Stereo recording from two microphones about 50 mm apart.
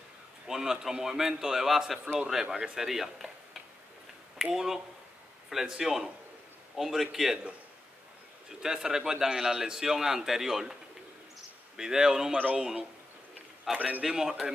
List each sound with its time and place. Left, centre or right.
0.5 s a man's voice: centre
2.8 s a man's voice: centre
4.5 s a man's voice: centre
8.6 s a man's voice: centre
13.7 s a man's voice: centre